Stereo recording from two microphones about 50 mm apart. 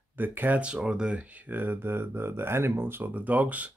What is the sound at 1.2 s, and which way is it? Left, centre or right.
Speech, right.